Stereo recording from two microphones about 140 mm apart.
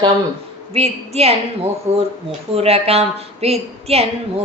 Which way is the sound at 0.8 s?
45° right (ahead or behind).